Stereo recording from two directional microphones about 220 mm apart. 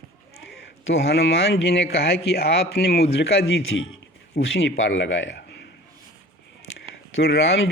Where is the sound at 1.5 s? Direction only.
50° left (ahead or behind).